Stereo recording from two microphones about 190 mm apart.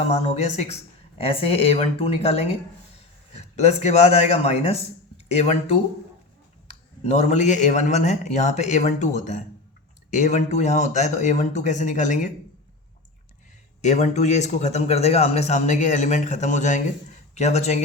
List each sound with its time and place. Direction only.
0.1 s a man's voice: 35° left (ahead or behind)
7.0 s a man's voice: 35° left (ahead or behind)
13.8 s a man's voice: 40° left (ahead or behind)